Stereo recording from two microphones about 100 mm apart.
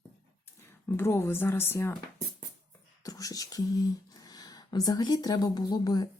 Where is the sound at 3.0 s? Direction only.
35° left (ahead or behind).